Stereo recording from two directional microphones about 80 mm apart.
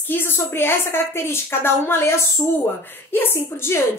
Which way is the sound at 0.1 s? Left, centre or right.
Left.